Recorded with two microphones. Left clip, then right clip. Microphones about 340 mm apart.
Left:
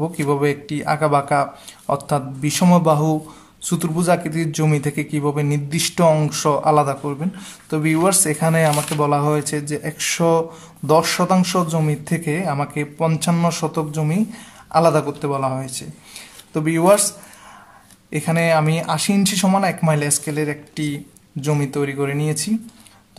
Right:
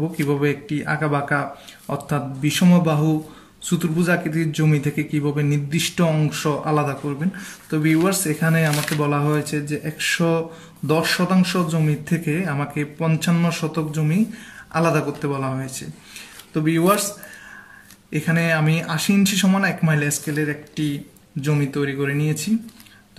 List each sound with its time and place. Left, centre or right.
0.2 s a man's voice: centre
18.1 s a man's voice: centre